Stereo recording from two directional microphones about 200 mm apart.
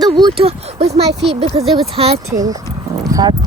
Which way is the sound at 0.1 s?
25° right (ahead or behind).